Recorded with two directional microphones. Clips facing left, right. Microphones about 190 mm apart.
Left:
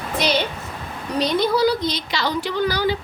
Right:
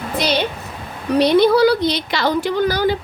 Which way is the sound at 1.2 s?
65° right (ahead or behind).